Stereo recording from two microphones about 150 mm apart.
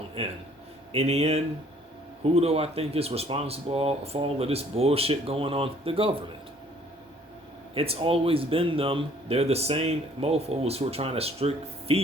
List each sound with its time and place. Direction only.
0.2 s speech: 40° right (ahead or behind)
7.7 s speech: 40° right (ahead or behind)